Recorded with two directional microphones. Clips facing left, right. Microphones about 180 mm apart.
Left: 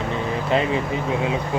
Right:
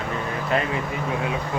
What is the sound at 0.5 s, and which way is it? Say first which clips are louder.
Speech: left 3 dB; 25° left (ahead or behind).